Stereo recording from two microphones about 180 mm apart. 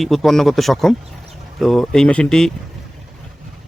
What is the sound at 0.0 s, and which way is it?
Speech, centre (ahead or behind).